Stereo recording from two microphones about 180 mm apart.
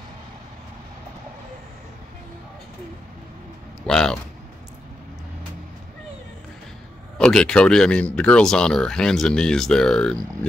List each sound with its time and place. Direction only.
3.8 s speech: 5° left (ahead or behind)
7.2 s speech: 5° left (ahead or behind)